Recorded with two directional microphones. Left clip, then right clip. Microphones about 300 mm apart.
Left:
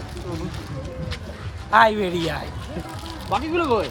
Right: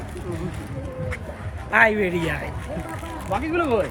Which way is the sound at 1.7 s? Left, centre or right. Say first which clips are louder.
Left 1 dB; centre.